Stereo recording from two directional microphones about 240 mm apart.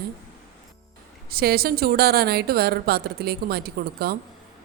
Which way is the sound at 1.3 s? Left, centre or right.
Right.